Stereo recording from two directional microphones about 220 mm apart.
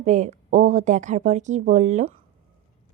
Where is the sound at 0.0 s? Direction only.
30° right (ahead or behind).